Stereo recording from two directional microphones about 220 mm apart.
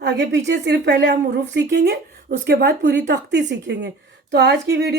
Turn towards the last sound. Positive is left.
turn(degrees=-50)  # may be behind; listen again after turning